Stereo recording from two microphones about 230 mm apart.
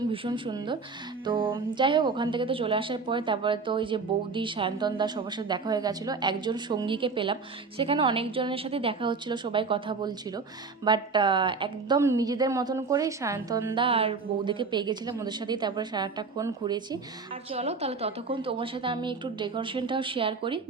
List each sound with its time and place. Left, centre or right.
0.1 s a woman's voice: right
13.7 s a woman's voice: right